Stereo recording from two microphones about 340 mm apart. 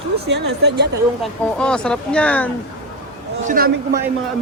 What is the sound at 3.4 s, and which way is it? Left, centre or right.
Speech, right.